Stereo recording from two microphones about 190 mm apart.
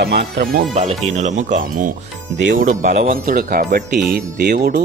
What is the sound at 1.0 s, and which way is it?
Speech, 40° right (ahead or behind).